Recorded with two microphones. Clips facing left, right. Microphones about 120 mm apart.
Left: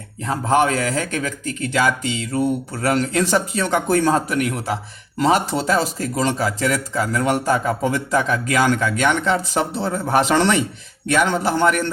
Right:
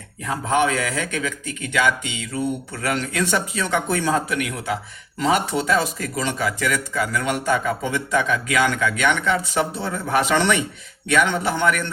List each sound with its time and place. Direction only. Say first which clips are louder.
0.3 s speech: left 3 dB; 40° left (ahead or behind)